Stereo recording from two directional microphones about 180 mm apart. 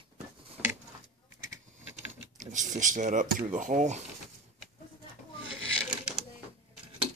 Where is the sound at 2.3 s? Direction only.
45° right (ahead or behind).